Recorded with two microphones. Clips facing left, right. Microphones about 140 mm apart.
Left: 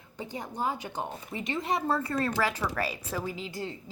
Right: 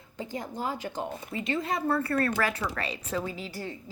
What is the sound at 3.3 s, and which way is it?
Speech, 20° left (ahead or behind).